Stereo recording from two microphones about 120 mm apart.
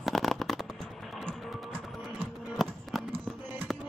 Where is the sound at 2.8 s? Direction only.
Centre (ahead or behind).